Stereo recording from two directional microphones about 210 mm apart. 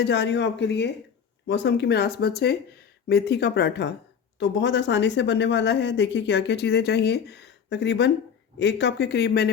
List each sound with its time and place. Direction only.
0.0 s speech: 55° left (ahead or behind)